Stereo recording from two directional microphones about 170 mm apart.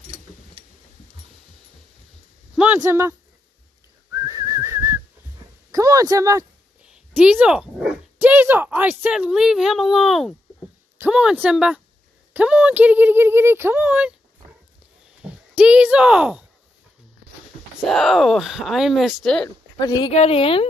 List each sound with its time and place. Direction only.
2.5 s speech: 10° right (ahead or behind)
4.1 s whistling: 20° right (ahead or behind)
5.7 s a sound: 20° right (ahead or behind)
6.8 s speech: 5° right (ahead or behind)
15.2 s speech: 5° right (ahead or behind)
17.8 s speech: centre (ahead or behind)
19.4 s a woman's voice: 25° left (ahead or behind)